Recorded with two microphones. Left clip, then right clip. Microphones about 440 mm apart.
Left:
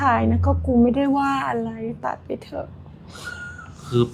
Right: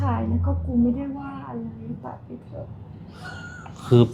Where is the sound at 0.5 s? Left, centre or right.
Left.